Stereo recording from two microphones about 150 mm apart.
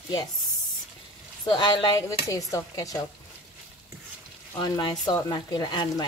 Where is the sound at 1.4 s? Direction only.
30° left (ahead or behind).